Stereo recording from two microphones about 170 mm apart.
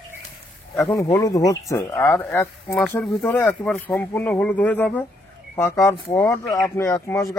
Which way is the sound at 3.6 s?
5° left (ahead or behind).